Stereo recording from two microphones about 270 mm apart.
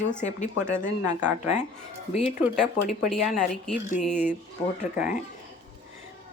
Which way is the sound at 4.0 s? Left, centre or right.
Centre.